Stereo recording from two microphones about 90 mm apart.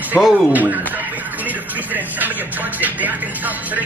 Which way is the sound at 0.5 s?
20° right (ahead or behind).